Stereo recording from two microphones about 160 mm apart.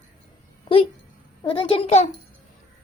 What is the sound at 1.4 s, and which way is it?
Female singing, 35° left (ahead or behind).